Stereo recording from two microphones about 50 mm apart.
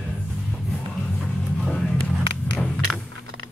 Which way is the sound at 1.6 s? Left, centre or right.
Centre.